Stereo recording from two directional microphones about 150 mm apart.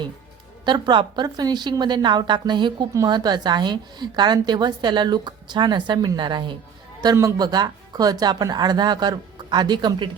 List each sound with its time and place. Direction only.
0.6 s a woman's voice: 30° right (ahead or behind)